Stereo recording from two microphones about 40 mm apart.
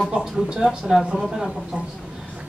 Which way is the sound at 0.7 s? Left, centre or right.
Centre.